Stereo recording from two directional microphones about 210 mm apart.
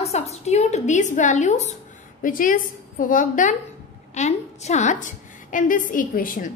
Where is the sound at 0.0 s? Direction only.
30° left (ahead or behind).